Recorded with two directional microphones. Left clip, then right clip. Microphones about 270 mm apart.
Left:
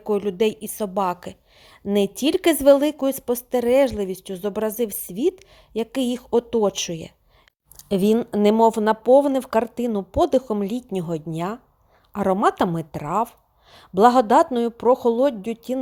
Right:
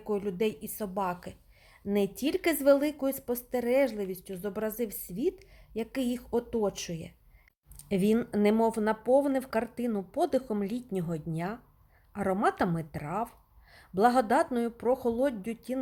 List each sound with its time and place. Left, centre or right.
0.0 s a woman's voice: left